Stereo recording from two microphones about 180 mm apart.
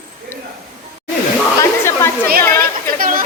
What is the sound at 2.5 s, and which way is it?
Speech, 50° right (ahead or behind).